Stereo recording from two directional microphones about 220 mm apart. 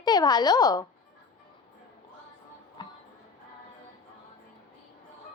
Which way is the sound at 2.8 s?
20° left (ahead or behind).